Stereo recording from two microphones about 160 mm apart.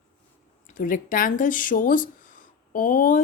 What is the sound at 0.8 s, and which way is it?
A woman's voice, 60° left (ahead or behind).